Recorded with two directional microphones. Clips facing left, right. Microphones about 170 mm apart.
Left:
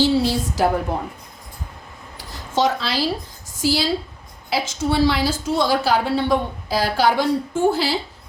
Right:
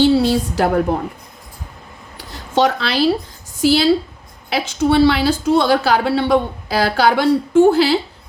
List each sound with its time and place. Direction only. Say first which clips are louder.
0.0 s a woman's voice: right 5 dB; 65° right (ahead or behind)
2.6 s a woman's voice: right 4 dB; 65° right (ahead or behind)